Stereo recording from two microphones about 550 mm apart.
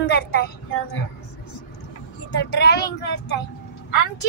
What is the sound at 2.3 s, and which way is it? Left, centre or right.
Speech, centre.